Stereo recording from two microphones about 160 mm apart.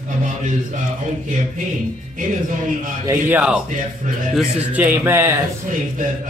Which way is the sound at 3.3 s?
10° right (ahead or behind).